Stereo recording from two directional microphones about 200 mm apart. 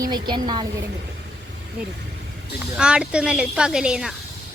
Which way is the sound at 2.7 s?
5° right (ahead or behind).